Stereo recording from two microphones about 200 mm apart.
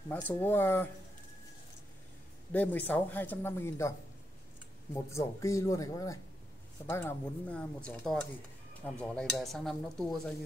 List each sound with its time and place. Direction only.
0.1 s speech: 10° left (ahead or behind)
2.5 s speech: 10° left (ahead or behind)
5.1 s speech: 15° left (ahead or behind)